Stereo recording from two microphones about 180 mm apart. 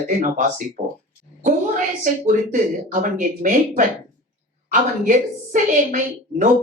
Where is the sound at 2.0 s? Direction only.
45° right (ahead or behind).